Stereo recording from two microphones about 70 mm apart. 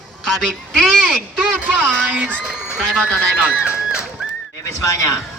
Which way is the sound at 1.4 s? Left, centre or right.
Centre.